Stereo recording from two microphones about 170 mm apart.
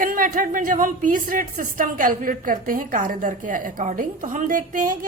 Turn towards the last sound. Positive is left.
turn(degrees=-50)  # may be behind; listen again after turning